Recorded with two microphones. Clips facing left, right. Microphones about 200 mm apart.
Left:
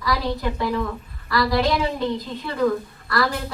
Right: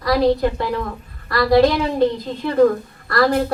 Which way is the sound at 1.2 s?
55° right (ahead or behind).